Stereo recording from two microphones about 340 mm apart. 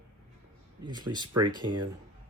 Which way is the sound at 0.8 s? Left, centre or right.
Centre.